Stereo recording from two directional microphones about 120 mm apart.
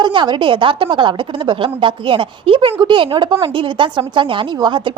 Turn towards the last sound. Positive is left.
turn(degrees=-40)  # may be behind; listen again after turning